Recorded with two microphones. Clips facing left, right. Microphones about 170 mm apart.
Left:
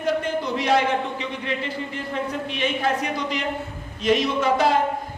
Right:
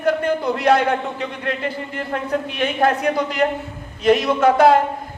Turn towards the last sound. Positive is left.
turn(degrees=-60)  # may be behind; listen again after turning